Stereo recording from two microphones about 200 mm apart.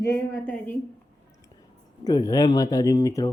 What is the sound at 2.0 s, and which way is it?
Speech, 20° left (ahead or behind).